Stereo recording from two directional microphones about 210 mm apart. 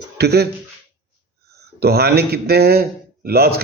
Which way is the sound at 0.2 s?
50° right (ahead or behind).